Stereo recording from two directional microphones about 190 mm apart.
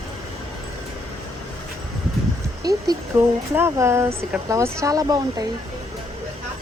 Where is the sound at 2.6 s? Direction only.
20° right (ahead or behind).